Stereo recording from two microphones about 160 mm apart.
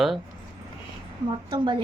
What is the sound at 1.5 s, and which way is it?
Speech, 30° right (ahead or behind).